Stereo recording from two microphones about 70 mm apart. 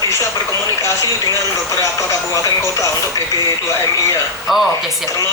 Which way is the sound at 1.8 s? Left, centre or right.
Left.